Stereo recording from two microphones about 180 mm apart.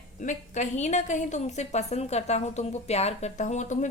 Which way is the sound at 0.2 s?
45° left (ahead or behind).